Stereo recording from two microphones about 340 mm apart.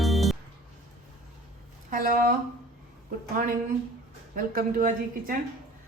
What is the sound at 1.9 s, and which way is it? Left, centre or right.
Speech, right.